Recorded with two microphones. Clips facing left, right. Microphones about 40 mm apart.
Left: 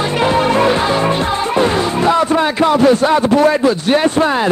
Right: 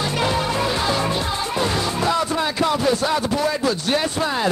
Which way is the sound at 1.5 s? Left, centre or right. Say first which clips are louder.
Left 7 dB; left.